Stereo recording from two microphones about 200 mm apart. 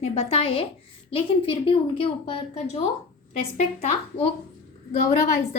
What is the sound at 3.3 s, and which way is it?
A woman's voice, 30° left (ahead or behind).